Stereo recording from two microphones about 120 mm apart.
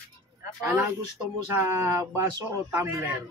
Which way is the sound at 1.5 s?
20° right (ahead or behind).